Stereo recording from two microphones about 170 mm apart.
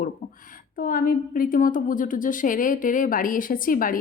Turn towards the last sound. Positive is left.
turn(degrees=55)  # may be behind; listen again after turning